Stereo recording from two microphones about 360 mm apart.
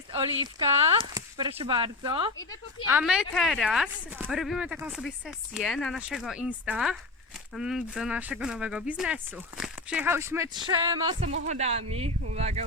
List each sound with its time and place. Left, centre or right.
0.7 s speech: centre